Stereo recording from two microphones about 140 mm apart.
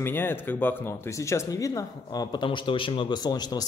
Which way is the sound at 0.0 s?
15° left (ahead or behind).